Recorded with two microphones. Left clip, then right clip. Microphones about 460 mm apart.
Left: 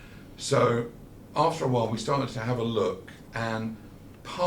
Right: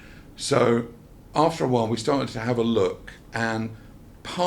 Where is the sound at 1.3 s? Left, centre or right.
Right.